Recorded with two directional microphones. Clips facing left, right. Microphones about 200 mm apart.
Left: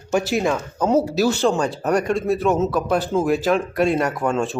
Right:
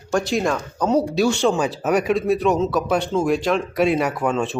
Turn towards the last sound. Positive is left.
turn(degrees=0)  # may be behind; listen again after turning